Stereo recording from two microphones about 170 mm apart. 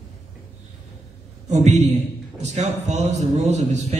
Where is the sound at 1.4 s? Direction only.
40° right (ahead or behind).